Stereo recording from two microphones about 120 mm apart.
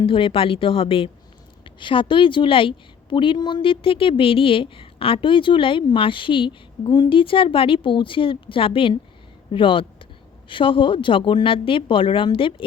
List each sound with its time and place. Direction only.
0.0 s a woman's voice: 45° left (ahead or behind)